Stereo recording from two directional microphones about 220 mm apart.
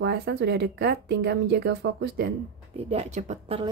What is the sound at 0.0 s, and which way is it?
Speech, 50° right (ahead or behind).